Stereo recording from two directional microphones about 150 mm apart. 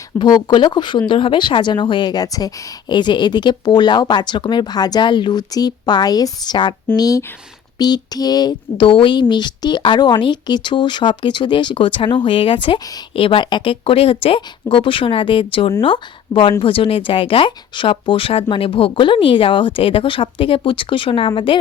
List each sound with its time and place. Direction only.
0.2 s speech: 30° left (ahead or behind)